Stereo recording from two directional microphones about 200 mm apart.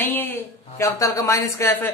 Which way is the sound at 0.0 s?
10° left (ahead or behind).